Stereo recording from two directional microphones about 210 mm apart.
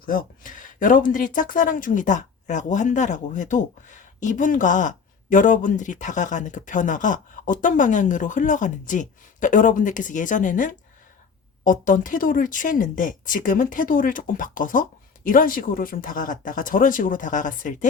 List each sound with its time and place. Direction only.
0.0 s speech: 40° left (ahead or behind)